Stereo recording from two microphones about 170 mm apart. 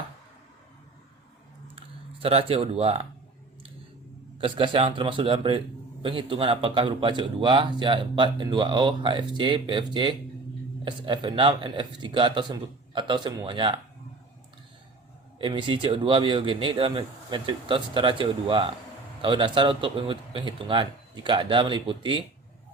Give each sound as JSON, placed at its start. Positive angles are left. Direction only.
{"t": 1.6, "sound": "typing", "side_deg": -30}
{"t": 4.4, "sound": "a man's voice", "side_deg": -30}
{"t": 15.4, "sound": "speech", "side_deg": -30}